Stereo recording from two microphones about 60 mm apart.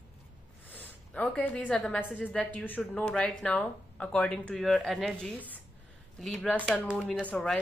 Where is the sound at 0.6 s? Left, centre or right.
Left.